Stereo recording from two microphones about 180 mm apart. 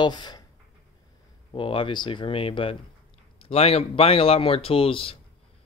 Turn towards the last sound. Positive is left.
turn(degrees=30)  # may be behind; listen again after turning